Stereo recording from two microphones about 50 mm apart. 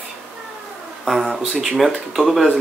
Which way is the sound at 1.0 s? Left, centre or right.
Centre.